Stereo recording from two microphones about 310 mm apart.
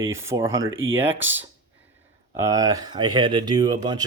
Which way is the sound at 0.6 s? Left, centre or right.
Right.